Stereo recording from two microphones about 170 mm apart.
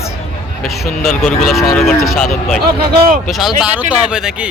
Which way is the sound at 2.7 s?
60° right (ahead or behind).